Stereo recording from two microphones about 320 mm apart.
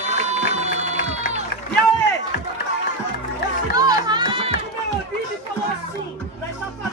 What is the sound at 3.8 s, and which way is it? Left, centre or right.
Music, centre.